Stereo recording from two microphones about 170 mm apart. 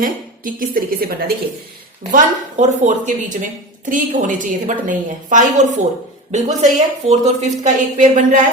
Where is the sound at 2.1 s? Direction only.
45° right (ahead or behind).